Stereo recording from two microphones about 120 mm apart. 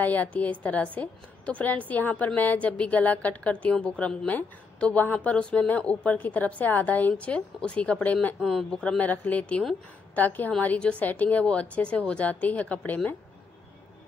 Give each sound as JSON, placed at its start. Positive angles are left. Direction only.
{"t": 0.0, "sound": "a woman's voice", "side_deg": 15}
{"t": 8.4, "sound": "a woman's voice", "side_deg": 0}